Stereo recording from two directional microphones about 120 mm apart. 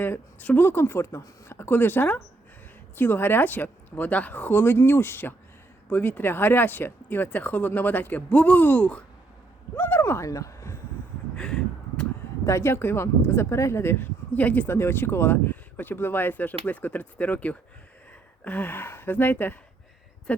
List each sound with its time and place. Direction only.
0.0 s speech: 15° left (ahead or behind)
11.3 s a sound: 5° left (ahead or behind)
12.5 s speech: 20° left (ahead or behind)